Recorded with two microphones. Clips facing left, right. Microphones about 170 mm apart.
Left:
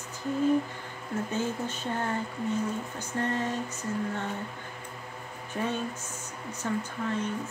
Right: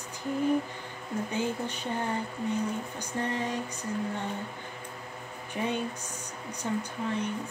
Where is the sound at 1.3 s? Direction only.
15° right (ahead or behind).